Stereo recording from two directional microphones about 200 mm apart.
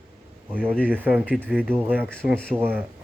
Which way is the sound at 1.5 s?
5° left (ahead or behind).